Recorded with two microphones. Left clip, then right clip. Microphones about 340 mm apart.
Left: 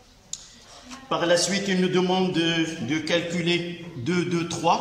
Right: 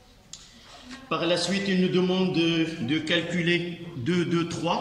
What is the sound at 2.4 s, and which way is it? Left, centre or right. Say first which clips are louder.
A man's voice: left 1 dB; centre.